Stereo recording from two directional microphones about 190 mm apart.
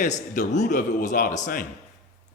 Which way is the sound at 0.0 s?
40° left (ahead or behind).